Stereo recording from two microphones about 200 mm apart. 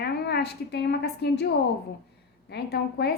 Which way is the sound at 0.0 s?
55° left (ahead or behind).